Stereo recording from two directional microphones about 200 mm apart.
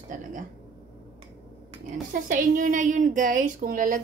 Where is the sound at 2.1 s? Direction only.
40° right (ahead or behind).